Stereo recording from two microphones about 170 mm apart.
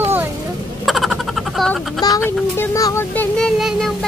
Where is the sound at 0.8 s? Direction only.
Centre (ahead or behind).